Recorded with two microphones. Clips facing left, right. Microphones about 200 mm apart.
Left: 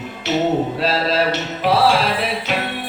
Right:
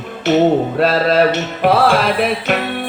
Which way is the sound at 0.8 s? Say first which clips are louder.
Right 6 dB; 55° right (ahead or behind).